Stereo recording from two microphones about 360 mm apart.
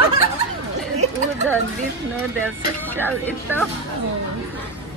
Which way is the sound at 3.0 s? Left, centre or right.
Centre.